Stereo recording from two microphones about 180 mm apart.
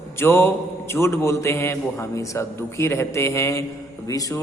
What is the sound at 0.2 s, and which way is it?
A man's voice, 15° left (ahead or behind).